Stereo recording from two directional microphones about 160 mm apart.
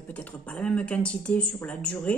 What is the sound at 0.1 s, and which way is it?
Speech, 10° left (ahead or behind).